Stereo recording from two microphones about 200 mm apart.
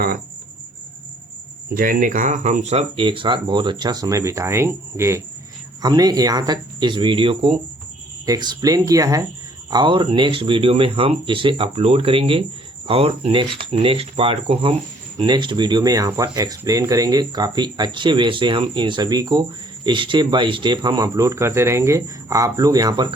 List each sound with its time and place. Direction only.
1.7 s speech: 45° right (ahead or behind); by 23.0 s 20° right (ahead or behind)